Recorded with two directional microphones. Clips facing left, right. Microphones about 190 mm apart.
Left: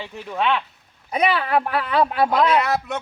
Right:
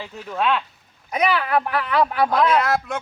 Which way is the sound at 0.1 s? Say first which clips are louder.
Left 1 dB; 10° left (ahead or behind).